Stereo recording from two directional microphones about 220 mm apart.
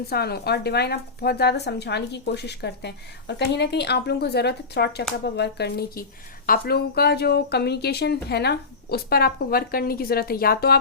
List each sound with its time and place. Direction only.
0.1 s speech: 45° left (ahead or behind)